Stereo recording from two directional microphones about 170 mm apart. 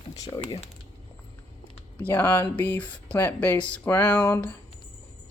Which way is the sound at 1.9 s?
10° left (ahead or behind).